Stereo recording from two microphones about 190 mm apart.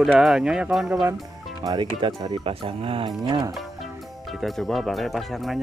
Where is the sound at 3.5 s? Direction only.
Centre (ahead or behind).